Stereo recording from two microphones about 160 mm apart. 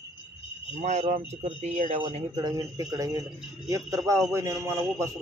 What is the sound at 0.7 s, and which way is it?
A man's voice, 45° right (ahead or behind).